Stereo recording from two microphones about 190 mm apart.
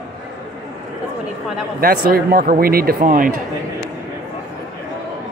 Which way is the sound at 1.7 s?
50° right (ahead or behind).